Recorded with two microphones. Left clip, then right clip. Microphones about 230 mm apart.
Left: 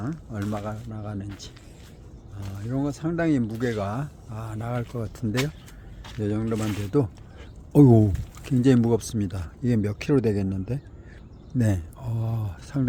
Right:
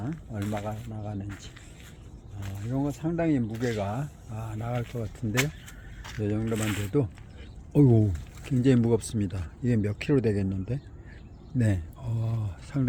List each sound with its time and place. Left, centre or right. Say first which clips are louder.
0.1 s speech: left 2 dB; centre
7.7 s speech: left 6 dB; left
8.4 s speech: left 3 dB; centre